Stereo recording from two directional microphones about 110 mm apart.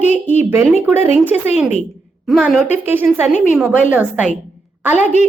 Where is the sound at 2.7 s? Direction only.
20° right (ahead or behind).